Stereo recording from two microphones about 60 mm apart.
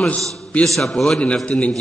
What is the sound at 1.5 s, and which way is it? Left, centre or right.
Speech, centre.